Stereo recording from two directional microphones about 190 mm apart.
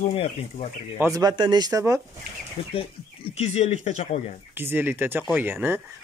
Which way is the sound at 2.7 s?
30° left (ahead or behind).